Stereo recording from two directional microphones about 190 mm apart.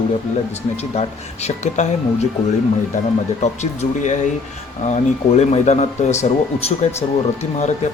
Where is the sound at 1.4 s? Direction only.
35° left (ahead or behind).